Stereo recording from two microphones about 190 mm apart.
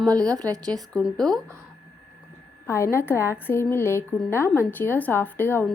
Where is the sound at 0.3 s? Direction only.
20° right (ahead or behind).